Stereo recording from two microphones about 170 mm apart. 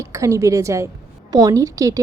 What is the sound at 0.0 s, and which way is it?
A woman's voice, 15° right (ahead or behind).